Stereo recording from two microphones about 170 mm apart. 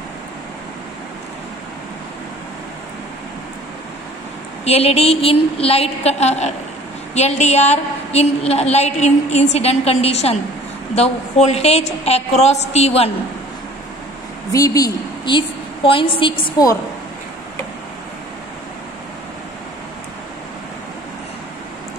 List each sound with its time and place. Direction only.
4.6 s a woman's voice: 35° left (ahead or behind)
14.5 s a woman's voice: 20° left (ahead or behind)